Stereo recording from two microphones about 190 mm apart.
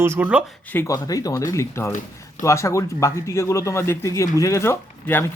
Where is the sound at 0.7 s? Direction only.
15° left (ahead or behind).